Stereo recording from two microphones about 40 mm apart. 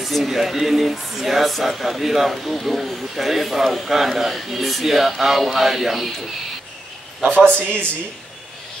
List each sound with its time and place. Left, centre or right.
0.0 s speech: centre
7.2 s a man's voice: right